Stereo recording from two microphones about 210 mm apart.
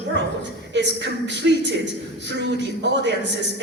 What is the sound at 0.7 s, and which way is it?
Speech, 55° right (ahead or behind).